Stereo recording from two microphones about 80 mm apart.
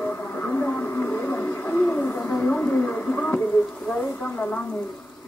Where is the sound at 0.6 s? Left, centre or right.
Left.